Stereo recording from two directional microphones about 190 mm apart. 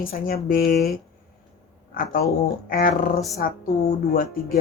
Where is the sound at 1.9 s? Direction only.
50° left (ahead or behind).